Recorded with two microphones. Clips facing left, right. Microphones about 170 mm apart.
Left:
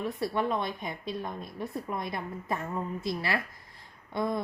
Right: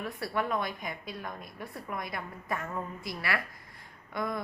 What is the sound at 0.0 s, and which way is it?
A woman's voice, 25° left (ahead or behind).